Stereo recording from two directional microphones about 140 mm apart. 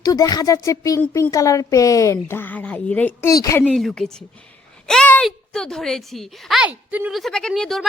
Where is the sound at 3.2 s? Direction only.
25° left (ahead or behind).